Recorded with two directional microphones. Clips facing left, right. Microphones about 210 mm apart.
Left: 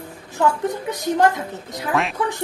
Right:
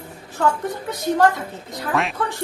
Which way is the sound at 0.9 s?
15° left (ahead or behind).